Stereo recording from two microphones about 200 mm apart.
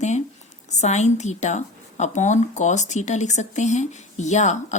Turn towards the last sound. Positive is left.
turn(degrees=35)  # may be behind; listen again after turning